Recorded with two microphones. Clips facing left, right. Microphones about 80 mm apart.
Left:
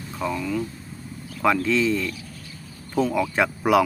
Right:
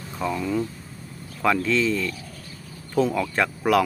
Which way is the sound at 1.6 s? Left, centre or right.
Centre.